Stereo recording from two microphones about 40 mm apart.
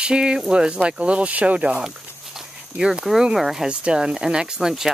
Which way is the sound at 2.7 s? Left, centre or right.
Right.